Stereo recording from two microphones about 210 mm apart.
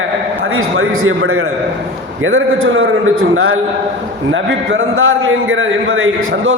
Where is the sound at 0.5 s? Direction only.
75° right (ahead or behind).